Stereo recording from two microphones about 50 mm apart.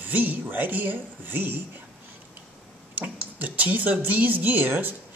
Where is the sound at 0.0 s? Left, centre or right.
Right.